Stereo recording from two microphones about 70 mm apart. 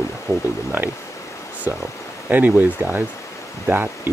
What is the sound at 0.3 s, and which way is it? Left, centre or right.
Speech, left.